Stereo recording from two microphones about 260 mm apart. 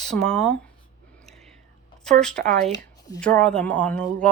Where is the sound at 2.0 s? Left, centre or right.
Centre.